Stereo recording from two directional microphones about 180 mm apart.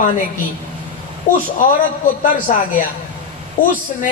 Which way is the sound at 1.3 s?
45° left (ahead or behind).